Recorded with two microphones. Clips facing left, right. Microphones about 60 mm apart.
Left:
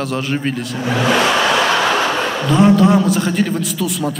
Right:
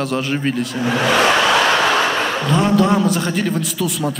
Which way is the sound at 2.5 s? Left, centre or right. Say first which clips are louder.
Left 4 dB; centre.